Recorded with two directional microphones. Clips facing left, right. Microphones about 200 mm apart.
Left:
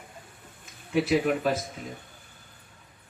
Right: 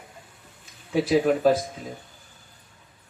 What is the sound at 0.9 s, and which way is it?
Speech, 35° right (ahead or behind).